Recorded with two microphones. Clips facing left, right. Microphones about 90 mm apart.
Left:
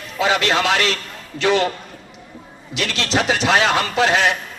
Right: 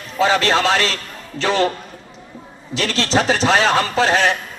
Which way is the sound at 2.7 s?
35° right (ahead or behind).